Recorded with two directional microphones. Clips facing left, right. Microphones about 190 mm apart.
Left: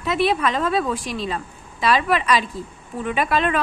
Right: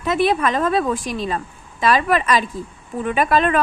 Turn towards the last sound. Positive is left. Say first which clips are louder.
# right 3 dB
turn(degrees=-45)  # may be behind; listen again after turning